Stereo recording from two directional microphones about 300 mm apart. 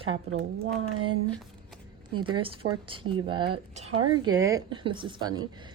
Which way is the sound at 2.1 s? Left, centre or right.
Centre.